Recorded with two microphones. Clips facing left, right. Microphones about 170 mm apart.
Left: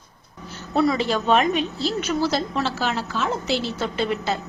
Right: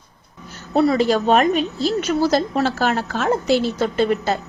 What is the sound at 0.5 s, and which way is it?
A woman's voice, 40° right (ahead or behind).